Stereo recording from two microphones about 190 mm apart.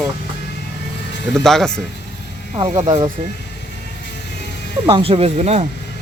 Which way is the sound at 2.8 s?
25° right (ahead or behind).